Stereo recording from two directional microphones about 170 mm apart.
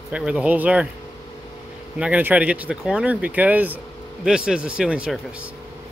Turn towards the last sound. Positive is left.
turn(degrees=-5)  # may be behind; listen again after turning